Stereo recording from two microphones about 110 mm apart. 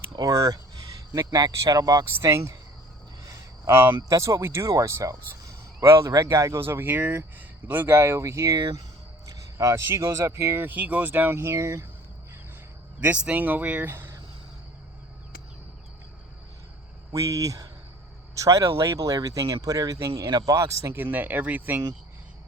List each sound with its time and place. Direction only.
0.1 s speech: 35° right (ahead or behind)
3.2 s a sound: 20° right (ahead or behind)
4.1 s speech: 30° right (ahead or behind)
13.0 s speech: 10° right (ahead or behind)
17.1 s speech: 30° right (ahead or behind)